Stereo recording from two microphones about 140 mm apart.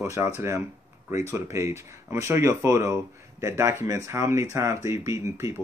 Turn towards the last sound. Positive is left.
turn(degrees=-20)  # may be behind; listen again after turning